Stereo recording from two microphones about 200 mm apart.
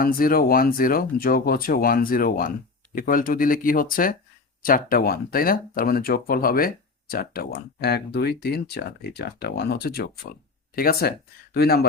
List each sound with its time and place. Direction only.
0.0 s speech: 45° left (ahead or behind)